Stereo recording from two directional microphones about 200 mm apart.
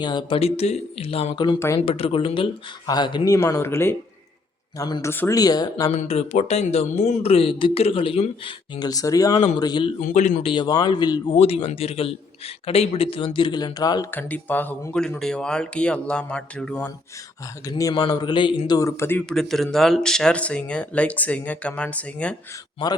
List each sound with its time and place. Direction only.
0.0 s a man's voice: 20° left (ahead or behind)
1.8 s a man's voice: 30° left (ahead or behind)
5.9 s a man's voice: 35° left (ahead or behind)
10.0 s speech: 40° left (ahead or behind)
10.5 s a man's voice: 20° left (ahead or behind); by 16.9 s 5° left (ahead or behind)
17.7 s speech: 20° left (ahead or behind)